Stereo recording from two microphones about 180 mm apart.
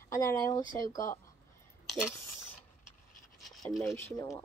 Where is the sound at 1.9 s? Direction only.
5° right (ahead or behind).